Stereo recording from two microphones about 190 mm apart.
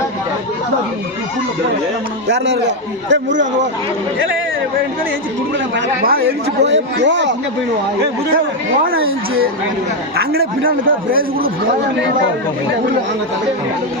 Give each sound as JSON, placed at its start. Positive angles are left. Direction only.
{"t": 2.2, "sound": "a man's voice", "side_deg": -65}
{"t": 6.0, "sound": "speech", "side_deg": -55}
{"t": 9.0, "sound": "speech", "side_deg": -90}
{"t": 10.7, "sound": "a man's voice", "side_deg": -50}